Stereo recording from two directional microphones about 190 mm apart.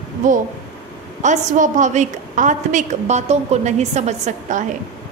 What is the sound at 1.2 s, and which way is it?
A woman's voice, 40° right (ahead or behind).